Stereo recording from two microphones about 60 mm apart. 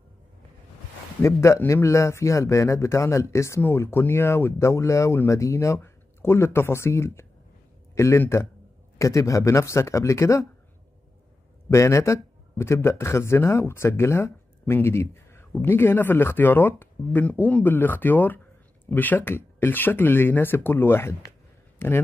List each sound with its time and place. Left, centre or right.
1.2 s speech: left
3.6 s speech: left
5.8 s a man's voice: left
11.7 s speech: left